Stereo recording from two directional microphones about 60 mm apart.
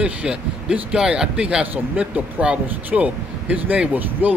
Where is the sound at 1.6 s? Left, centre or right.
Right.